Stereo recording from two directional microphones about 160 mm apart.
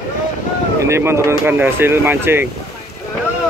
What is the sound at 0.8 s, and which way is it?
Speech, 15° right (ahead or behind).